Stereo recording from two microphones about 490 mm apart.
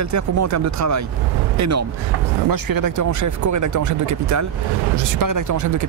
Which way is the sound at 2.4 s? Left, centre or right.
Right.